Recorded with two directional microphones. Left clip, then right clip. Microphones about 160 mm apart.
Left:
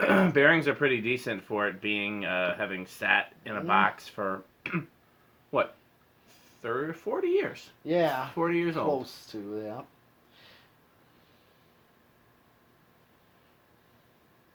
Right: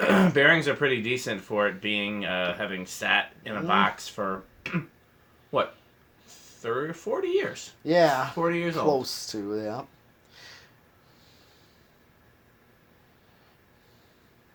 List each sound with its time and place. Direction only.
0.0 s speech: 45° left (ahead or behind)
6.2 s speech: 45° left (ahead or behind)
7.9 s speech: 40° right (ahead or behind)
8.4 s speech: 45° left (ahead or behind)
9.0 s speech: 40° right (ahead or behind)
10.3 s snort: 40° right (ahead or behind)